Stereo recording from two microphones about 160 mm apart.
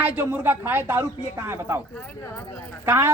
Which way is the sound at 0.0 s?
10° right (ahead or behind).